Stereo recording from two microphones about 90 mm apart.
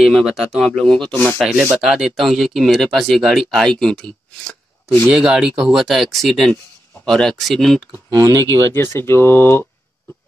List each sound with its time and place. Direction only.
0.0 s speech: 5° right (ahead or behind)
1.8 s speech: 5° right (ahead or behind)
5.0 s speech: 10° right (ahead or behind)
8.1 s speech: 40° right (ahead or behind)
8.5 s speech: 30° left (ahead or behind)